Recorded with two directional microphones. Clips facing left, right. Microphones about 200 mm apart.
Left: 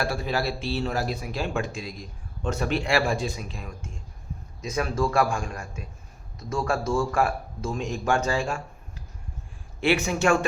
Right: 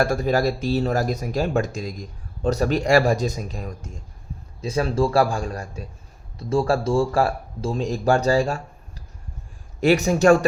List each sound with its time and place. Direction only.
0.0 s speech: 45° right (ahead or behind)
9.8 s speech: 40° right (ahead or behind)